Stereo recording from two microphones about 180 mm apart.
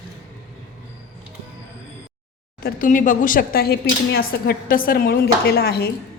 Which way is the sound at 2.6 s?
50° left (ahead or behind).